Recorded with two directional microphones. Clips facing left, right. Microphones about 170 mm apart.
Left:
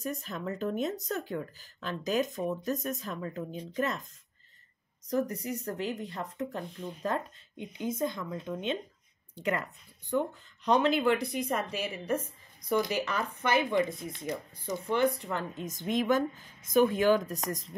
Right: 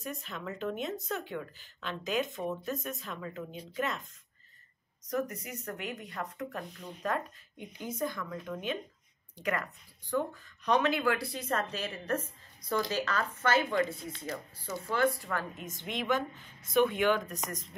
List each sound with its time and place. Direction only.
0.0 s speech: 40° left (ahead or behind)
5.0 s speech: 30° left (ahead or behind)
15.6 s speech: 40° left (ahead or behind)